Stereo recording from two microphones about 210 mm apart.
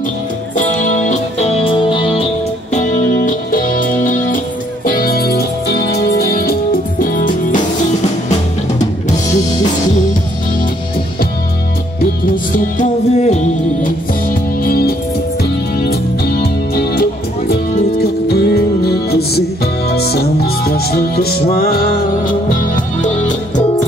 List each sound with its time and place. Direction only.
0.6 s music: 35° left (ahead or behind)
2.7 s music: 35° left (ahead or behind)
12.5 s music: 35° left (ahead or behind)
14.6 s music: 45° left (ahead or behind)
23.0 s music: 35° left (ahead or behind)